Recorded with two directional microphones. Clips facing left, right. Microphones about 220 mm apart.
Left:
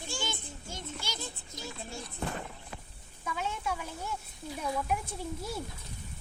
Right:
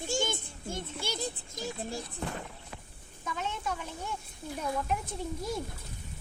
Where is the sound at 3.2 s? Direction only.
10° left (ahead or behind).